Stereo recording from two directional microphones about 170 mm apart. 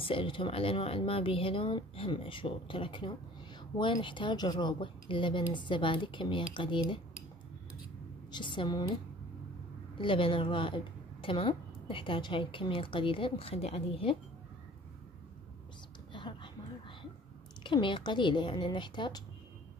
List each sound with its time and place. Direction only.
0.0 s a woman's voice: 30° left (ahead or behind)
8.3 s speech: 30° left (ahead or behind)
9.9 s a woman's voice: 30° left (ahead or behind)
16.1 s a sound: 30° left (ahead or behind)
17.6 s speech: 30° left (ahead or behind)